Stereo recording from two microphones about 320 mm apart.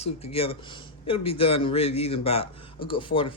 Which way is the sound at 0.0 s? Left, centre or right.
Centre.